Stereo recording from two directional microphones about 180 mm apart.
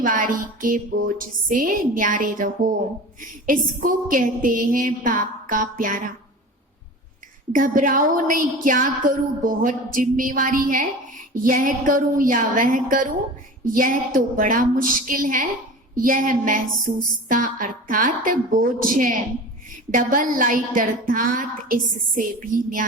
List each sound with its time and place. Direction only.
0.0 s a woman's voice: 50° right (ahead or behind)
7.5 s a woman's voice: 50° right (ahead or behind)